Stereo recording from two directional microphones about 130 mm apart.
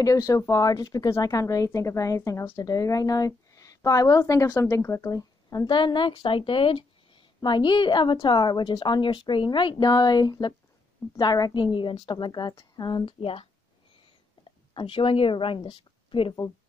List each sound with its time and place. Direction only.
0.0 s a woman's voice: 25° left (ahead or behind); by 13.5 s 45° left (ahead or behind)
14.7 s a woman's voice: 40° left (ahead or behind)